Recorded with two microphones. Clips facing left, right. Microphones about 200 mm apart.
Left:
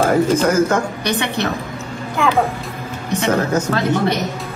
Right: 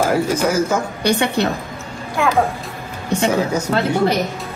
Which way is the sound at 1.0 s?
30° right (ahead or behind).